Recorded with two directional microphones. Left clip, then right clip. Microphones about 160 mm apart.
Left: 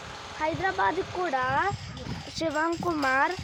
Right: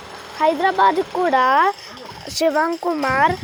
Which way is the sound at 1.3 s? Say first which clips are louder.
Right 12 dB; 40° right (ahead or behind).